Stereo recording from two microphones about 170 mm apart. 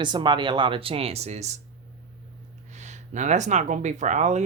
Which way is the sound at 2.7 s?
45° right (ahead or behind).